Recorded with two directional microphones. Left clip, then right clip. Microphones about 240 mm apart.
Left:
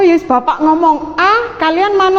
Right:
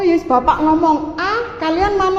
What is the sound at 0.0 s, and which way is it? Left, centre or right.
A woman's voice, left.